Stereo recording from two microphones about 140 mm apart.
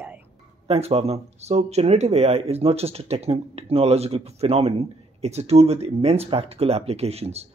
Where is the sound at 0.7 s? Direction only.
45° right (ahead or behind).